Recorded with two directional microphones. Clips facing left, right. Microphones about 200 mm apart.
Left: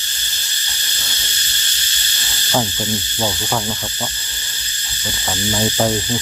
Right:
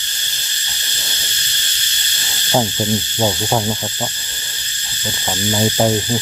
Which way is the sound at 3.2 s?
20° right (ahead or behind).